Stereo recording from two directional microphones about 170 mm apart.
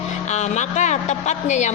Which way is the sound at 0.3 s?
45° left (ahead or behind).